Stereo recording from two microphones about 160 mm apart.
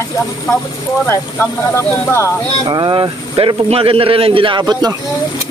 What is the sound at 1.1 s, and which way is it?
Speech, 15° left (ahead or behind).